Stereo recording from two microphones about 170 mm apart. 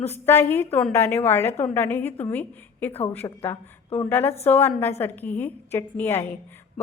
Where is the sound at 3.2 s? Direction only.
20° left (ahead or behind).